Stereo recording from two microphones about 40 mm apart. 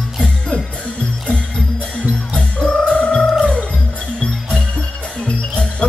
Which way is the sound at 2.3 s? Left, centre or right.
Left.